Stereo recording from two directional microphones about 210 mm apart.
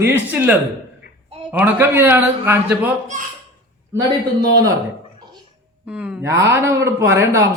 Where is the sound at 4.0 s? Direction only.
15° right (ahead or behind).